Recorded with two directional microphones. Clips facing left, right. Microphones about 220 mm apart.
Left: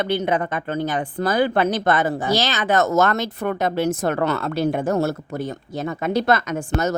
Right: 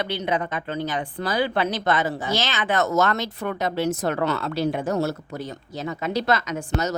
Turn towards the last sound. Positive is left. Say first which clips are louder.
# left 3 dB
turn(degrees=50)  # may be behind; listen again after turning